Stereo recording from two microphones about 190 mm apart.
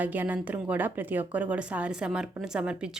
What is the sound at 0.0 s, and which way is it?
A woman's voice, 10° right (ahead or behind).